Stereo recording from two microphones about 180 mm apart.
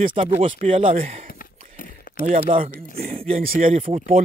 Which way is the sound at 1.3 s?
50° left (ahead or behind).